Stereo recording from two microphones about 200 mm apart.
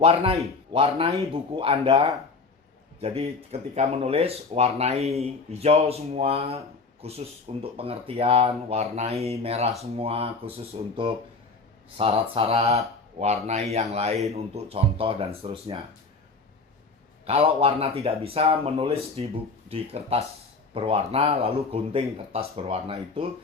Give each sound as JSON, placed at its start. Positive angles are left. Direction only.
{"t": 0.0, "sound": "speech", "side_deg": -30}
{"t": 17.2, "sound": "speech", "side_deg": -30}